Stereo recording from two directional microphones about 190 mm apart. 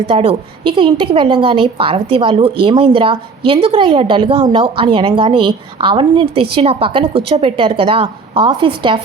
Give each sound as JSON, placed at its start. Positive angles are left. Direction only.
{"t": 0.1, "sound": "a woman's voice", "side_deg": -30}